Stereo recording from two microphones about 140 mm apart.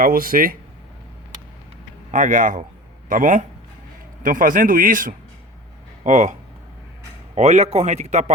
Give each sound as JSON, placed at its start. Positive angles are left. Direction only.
{"t": 0.0, "sound": "speech", "side_deg": -90}
{"t": 2.1, "sound": "a man's voice", "side_deg": -70}
{"t": 6.0, "sound": "speech", "side_deg": -60}
{"t": 7.3, "sound": "a man's voice", "side_deg": -50}